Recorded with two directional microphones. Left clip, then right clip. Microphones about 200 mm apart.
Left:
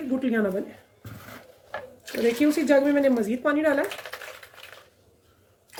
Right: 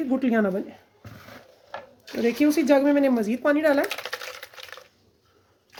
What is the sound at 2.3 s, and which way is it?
Speech, 40° right (ahead or behind).